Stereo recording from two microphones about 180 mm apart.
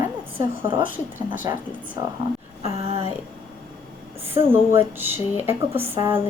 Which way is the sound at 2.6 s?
35° right (ahead or behind).